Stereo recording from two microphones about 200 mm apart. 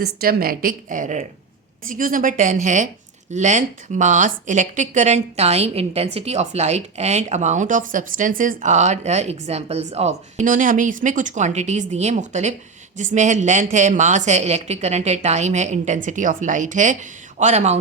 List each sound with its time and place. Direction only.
0.0 s a woman's voice: 50° right (ahead or behind)